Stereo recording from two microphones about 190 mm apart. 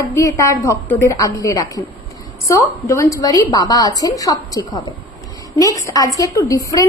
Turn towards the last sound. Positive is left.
turn(degrees=20)  # may be behind; listen again after turning